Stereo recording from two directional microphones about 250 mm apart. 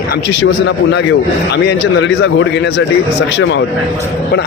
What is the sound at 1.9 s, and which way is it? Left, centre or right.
Speech, left.